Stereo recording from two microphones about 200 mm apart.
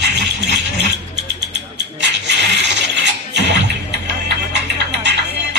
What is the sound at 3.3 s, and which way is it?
Music, 60° right (ahead or behind).